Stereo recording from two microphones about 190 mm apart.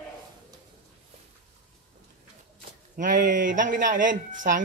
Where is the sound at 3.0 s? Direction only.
45° right (ahead or behind).